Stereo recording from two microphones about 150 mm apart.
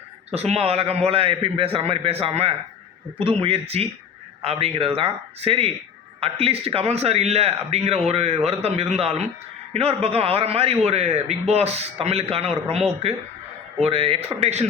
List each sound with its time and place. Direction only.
0.3 s a man's voice: 45° right (ahead or behind)